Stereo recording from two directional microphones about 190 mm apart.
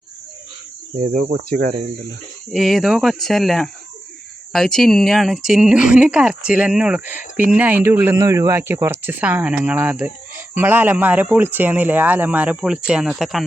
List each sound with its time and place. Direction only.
1.0 s speech: 50° right (ahead or behind)
2.5 s speech: centre (ahead or behind)